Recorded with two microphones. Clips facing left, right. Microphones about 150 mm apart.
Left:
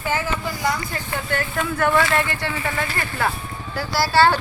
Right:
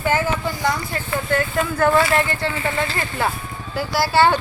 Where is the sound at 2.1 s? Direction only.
25° right (ahead or behind).